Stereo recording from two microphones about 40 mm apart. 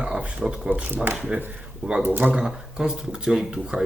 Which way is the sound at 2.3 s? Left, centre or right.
Centre.